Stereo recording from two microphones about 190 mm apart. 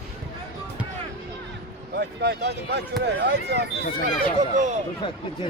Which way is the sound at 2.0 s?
60° right (ahead or behind).